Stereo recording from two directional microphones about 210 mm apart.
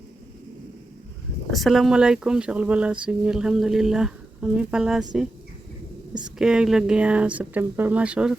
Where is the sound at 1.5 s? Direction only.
Centre (ahead or behind).